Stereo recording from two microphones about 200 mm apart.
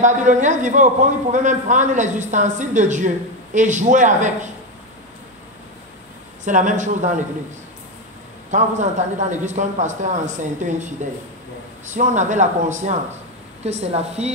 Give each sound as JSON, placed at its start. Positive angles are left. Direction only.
{"t": 0.0, "sound": "a man's voice", "side_deg": -40}
{"t": 6.4, "sound": "a man's voice", "side_deg": -40}
{"t": 8.5, "sound": "a man's voice", "side_deg": -35}